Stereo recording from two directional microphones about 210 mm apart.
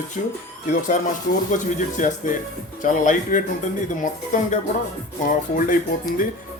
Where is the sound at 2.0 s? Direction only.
35° left (ahead or behind).